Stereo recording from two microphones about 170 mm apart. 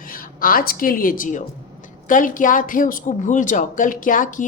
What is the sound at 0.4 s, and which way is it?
A woman's voice, 60° left (ahead or behind).